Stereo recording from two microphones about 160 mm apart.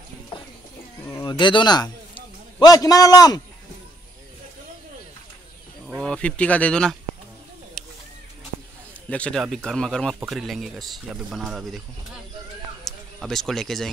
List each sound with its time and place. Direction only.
1.0 s bird: 20° left (ahead or behind)
1.4 s a man's voice: 30° left (ahead or behind)
5.9 s speech: 5° left (ahead or behind)
7.8 s a sound: centre (ahead or behind)
9.1 s speech: 5° left (ahead or behind)
12.8 s speech: centre (ahead or behind)